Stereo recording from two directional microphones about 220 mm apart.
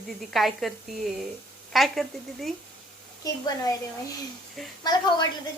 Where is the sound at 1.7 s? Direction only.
Centre (ahead or behind).